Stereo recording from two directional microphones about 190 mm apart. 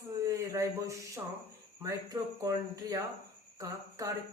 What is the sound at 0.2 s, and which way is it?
A man's voice, 15° right (ahead or behind).